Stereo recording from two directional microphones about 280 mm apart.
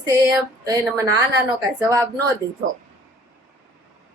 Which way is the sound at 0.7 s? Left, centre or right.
Centre.